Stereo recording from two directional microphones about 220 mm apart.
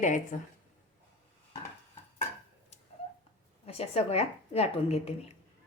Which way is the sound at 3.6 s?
25° left (ahead or behind).